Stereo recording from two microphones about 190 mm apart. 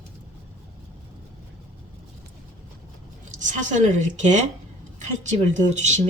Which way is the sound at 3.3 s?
40° right (ahead or behind).